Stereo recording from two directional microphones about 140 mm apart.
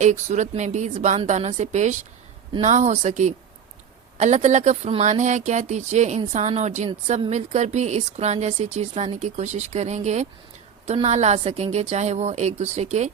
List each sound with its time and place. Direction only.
0.0 s a woman's voice: 60° right (ahead or behind)
10.8 s a woman's voice: 45° right (ahead or behind)